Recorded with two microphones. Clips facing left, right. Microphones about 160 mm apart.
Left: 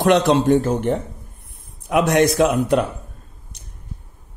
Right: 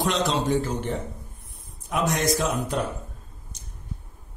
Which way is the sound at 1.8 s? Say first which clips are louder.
Left 8 dB; 70° left (ahead or behind).